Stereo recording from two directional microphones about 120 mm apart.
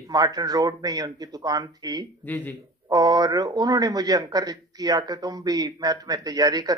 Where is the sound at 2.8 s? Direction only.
30° right (ahead or behind).